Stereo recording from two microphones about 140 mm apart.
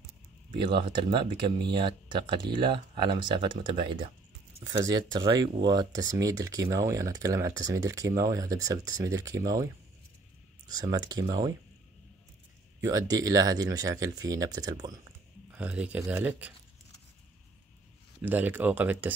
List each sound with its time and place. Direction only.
0.5 s speech: 35° right (ahead or behind)
10.7 s speech: 30° right (ahead or behind)
12.8 s speech: 25° right (ahead or behind)
15.5 s speech: 10° right (ahead or behind)
18.2 s speech: 10° right (ahead or behind)